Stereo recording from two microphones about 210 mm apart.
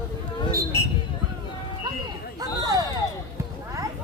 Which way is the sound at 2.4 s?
20° right (ahead or behind).